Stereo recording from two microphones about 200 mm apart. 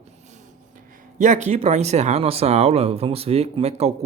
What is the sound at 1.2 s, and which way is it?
Speech, 35° right (ahead or behind).